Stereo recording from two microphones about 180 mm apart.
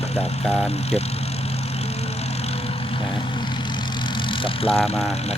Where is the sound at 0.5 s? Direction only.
35° left (ahead or behind).